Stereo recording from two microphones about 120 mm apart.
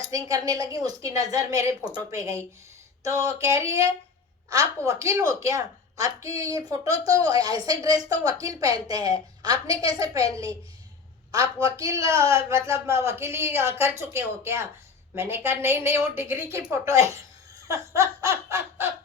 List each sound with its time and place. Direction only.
0.1 s speech: 30° right (ahead or behind)
4.9 s a woman's voice: 25° right (ahead or behind)
11.8 s speech: 25° right (ahead or behind)